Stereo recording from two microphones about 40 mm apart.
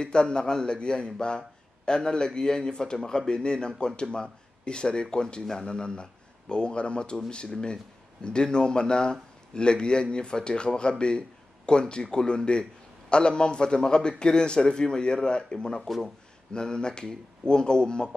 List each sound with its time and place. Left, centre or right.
0.0 s a man's voice: left